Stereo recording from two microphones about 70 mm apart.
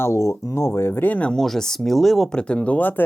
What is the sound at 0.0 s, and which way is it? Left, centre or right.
Speech, left.